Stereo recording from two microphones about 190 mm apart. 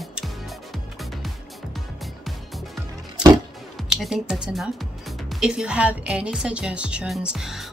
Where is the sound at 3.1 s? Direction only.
20° right (ahead or behind).